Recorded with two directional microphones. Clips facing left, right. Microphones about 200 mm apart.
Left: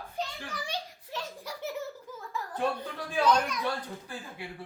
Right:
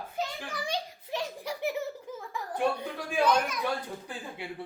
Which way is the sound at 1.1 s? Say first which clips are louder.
Right 5 dB; 15° right (ahead or behind).